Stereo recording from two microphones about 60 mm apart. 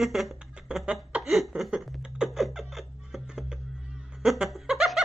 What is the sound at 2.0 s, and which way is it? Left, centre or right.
Music, centre.